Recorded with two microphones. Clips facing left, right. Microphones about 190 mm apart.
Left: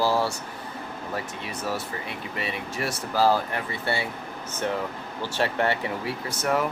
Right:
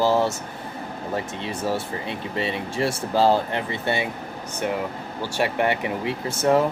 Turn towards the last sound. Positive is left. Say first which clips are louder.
# right 6 dB
turn(degrees=-25)  # may be behind; listen again after turning